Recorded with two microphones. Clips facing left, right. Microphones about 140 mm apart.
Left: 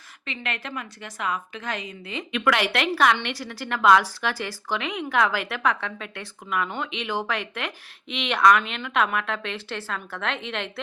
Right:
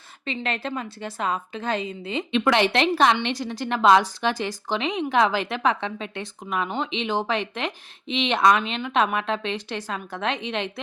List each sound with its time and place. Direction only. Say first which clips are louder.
0.3 s a woman's voice: right 5 dB; 30° right (ahead or behind)